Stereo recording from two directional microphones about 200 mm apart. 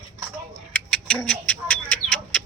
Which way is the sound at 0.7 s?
5° left (ahead or behind).